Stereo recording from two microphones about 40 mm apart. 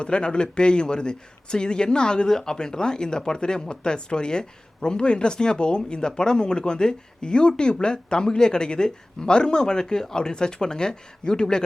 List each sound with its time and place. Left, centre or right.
0.0 s speech: left